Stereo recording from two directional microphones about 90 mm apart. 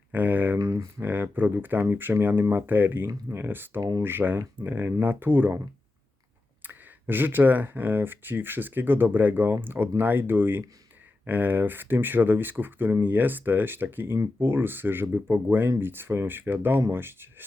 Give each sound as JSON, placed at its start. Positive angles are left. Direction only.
{"t": 0.1, "sound": "speech", "side_deg": -20}
{"t": 0.6, "sound": "speech", "side_deg": -40}
{"t": 0.9, "sound": "speech", "side_deg": -25}
{"t": 3.8, "sound": "speech", "side_deg": -45}
{"t": 4.0, "sound": "speech", "side_deg": -20}